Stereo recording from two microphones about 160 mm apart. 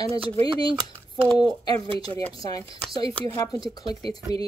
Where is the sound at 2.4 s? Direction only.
25° left (ahead or behind).